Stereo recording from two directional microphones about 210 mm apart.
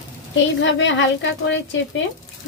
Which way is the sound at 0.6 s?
60° left (ahead or behind).